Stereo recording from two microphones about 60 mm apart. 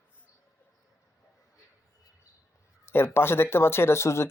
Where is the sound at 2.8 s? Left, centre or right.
Left.